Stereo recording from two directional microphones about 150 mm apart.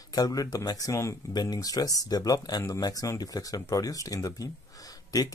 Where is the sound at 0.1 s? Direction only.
25° left (ahead or behind).